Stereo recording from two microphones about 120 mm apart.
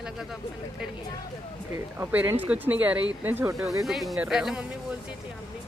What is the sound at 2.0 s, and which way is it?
Speech, 15° right (ahead or behind).